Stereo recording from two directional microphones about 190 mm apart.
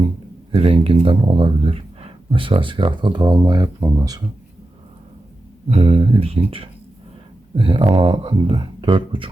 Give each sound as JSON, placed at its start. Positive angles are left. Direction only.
{"t": 0.5, "sound": "speech", "side_deg": -30}
{"t": 5.6, "sound": "speech", "side_deg": -30}